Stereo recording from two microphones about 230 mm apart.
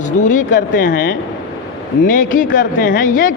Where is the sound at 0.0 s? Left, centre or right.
Left.